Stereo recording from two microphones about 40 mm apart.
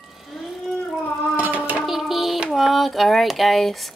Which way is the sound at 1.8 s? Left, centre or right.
Centre.